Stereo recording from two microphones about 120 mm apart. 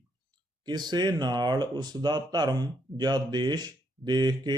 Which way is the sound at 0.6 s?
35° right (ahead or behind).